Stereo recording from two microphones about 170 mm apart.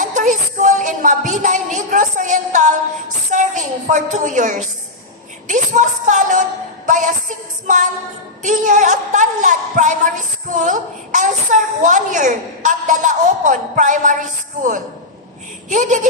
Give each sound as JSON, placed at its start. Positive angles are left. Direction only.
{"t": 0.0, "sound": "music", "side_deg": -50}
{"t": 3.3, "sound": "a woman's voice", "side_deg": -50}